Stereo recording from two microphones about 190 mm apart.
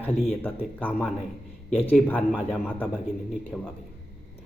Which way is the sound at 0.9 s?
5° right (ahead or behind).